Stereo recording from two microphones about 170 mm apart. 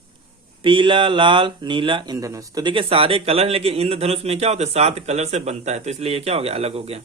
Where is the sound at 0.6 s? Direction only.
30° right (ahead or behind).